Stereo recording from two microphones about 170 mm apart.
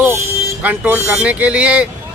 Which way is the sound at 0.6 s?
10° right (ahead or behind).